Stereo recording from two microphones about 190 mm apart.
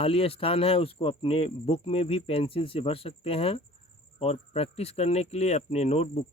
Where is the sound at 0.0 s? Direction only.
30° left (ahead or behind).